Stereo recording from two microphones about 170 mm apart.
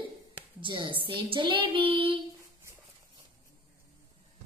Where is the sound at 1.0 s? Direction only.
30° right (ahead or behind).